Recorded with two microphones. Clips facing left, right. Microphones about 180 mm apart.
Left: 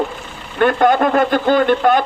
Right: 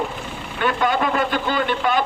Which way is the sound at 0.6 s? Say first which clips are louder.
Left 7 dB; 50° left (ahead or behind).